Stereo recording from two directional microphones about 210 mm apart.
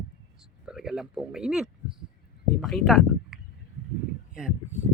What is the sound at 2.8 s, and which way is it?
Speech, centre (ahead or behind).